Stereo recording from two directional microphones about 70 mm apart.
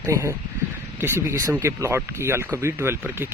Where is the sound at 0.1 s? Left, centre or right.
Right.